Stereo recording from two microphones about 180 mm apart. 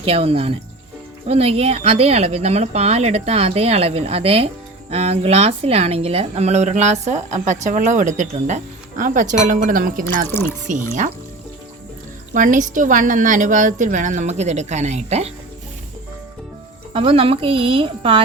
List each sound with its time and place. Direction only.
0.0 s a woman's voice: 30° right (ahead or behind); by 10.2 s 50° right (ahead or behind)
12.3 s a woman's voice: 45° right (ahead or behind)
16.9 s a woman's voice: 30° right (ahead or behind)